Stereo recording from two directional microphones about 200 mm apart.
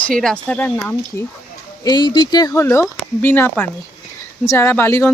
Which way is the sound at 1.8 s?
20° left (ahead or behind).